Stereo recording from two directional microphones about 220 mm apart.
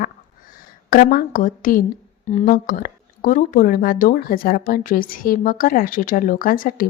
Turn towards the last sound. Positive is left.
turn(degrees=40)  # may be behind; listen again after turning